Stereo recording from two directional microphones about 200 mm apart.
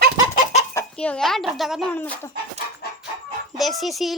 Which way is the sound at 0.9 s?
5° left (ahead or behind).